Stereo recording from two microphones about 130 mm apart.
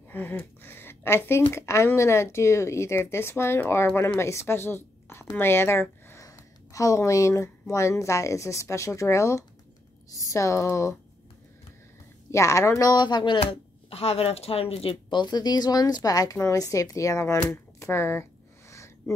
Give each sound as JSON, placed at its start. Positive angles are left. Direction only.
{"t": 0.1, "sound": "a woman's voice", "side_deg": 15}
{"t": 12.3, "sound": "speech", "side_deg": 20}
{"t": 13.4, "sound": "speech", "side_deg": 50}
{"t": 18.7, "sound": "a sound", "side_deg": 20}